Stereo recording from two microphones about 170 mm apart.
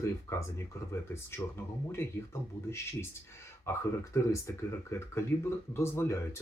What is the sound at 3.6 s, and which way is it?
Speech, 15° left (ahead or behind).